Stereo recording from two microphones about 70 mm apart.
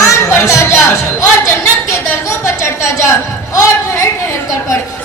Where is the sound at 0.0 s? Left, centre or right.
Left.